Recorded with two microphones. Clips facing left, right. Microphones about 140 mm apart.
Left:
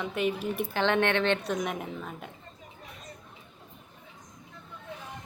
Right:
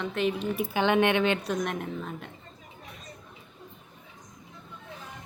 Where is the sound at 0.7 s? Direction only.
15° right (ahead or behind); by 2.3 s centre (ahead or behind).